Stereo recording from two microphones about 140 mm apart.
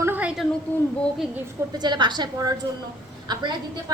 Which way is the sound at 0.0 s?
10° right (ahead or behind).